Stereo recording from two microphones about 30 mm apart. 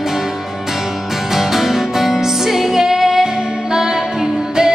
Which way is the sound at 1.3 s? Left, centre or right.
Centre.